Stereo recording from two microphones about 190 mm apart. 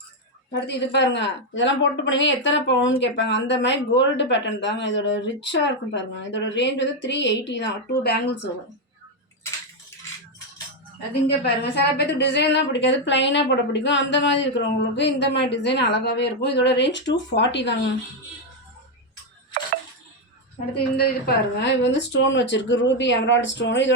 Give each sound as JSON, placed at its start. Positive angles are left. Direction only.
{"t": 0.5, "sound": "speech", "side_deg": 65}
{"t": 11.3, "sound": "a woman's voice", "side_deg": 65}
{"t": 20.7, "sound": "speech", "side_deg": 55}